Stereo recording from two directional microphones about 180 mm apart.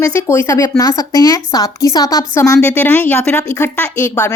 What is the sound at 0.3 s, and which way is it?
A woman's voice, 15° left (ahead or behind).